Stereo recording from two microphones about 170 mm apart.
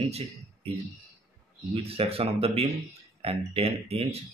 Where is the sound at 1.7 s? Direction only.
35° right (ahead or behind).